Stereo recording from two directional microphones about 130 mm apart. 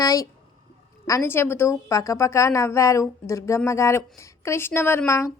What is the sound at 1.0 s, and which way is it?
A woman's voice, 20° left (ahead or behind).